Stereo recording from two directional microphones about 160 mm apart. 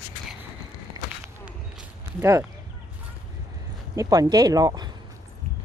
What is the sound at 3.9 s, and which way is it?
Speech, 20° right (ahead or behind).